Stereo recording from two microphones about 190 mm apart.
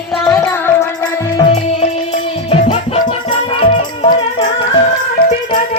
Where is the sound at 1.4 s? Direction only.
30° left (ahead or behind).